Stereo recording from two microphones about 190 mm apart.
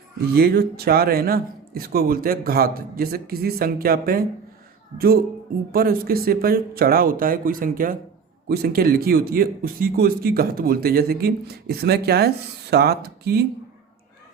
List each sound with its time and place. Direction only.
0.3 s a man's voice: 55° right (ahead or behind)